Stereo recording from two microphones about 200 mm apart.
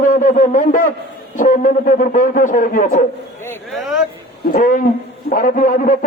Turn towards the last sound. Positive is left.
turn(degrees=40)  # may be behind; listen again after turning